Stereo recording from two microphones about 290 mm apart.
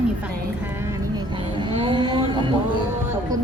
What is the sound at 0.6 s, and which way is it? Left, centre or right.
Vehicle, centre.